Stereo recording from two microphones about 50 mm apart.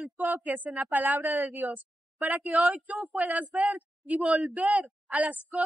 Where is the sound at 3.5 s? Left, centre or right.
Right.